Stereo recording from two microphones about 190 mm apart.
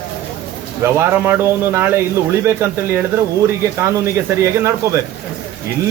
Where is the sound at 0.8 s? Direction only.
10° right (ahead or behind).